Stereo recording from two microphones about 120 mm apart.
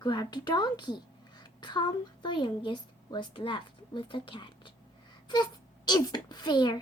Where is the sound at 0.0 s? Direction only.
35° left (ahead or behind).